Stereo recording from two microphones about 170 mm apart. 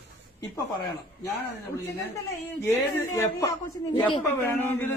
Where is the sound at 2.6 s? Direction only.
15° left (ahead or behind).